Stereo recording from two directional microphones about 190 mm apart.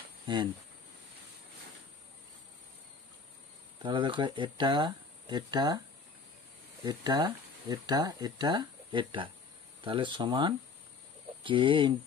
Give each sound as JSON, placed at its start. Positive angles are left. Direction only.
{"t": 0.3, "sound": "speech", "side_deg": -25}
{"t": 3.8, "sound": "speech", "side_deg": -25}
{"t": 6.8, "sound": "speech", "side_deg": -20}